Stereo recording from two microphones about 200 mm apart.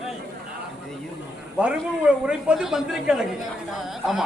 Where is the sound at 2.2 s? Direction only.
5° right (ahead or behind).